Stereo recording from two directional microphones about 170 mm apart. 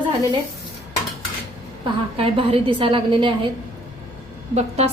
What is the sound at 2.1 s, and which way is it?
A woman's voice, 35° right (ahead or behind).